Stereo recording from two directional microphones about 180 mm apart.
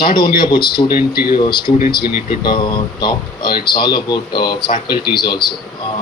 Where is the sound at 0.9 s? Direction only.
55° left (ahead or behind).